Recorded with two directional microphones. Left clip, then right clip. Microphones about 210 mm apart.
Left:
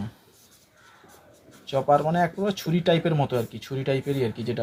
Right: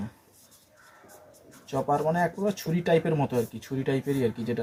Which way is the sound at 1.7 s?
30° left (ahead or behind).